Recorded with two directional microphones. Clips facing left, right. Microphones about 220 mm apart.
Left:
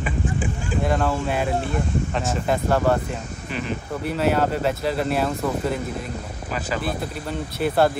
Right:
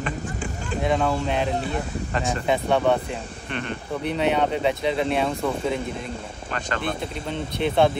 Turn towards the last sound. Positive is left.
turn(degrees=5)  # may be behind; listen again after turning